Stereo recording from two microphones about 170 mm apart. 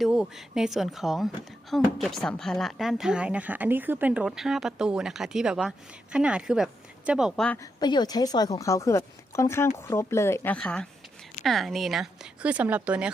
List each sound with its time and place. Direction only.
0.0 s speech: 5° right (ahead or behind)
7.6 s a woman's voice: 25° left (ahead or behind); by 13.1 s 5° right (ahead or behind)